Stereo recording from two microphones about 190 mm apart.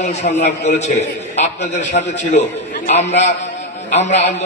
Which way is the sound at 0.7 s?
35° left (ahead or behind).